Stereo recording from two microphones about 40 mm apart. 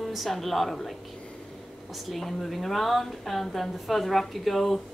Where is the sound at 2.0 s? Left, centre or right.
Centre.